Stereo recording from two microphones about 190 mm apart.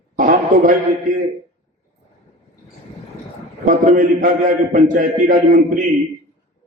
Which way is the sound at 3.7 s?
45° right (ahead or behind).